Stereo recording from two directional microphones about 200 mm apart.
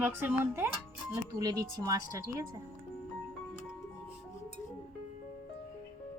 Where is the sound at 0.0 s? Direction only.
10° right (ahead or behind).